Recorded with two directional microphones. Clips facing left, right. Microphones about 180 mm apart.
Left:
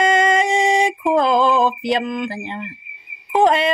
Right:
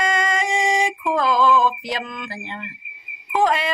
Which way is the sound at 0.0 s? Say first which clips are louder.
Left 6 dB; 25° left (ahead or behind).